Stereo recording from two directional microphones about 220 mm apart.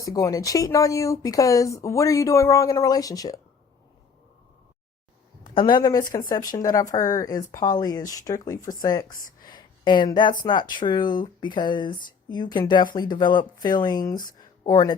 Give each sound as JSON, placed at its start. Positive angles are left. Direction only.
{"t": 0.0, "sound": "speech", "side_deg": 15}
{"t": 5.5, "sound": "speech", "side_deg": 20}
{"t": 9.5, "sound": "a sound", "side_deg": 20}
{"t": 10.4, "sound": "speech", "side_deg": 20}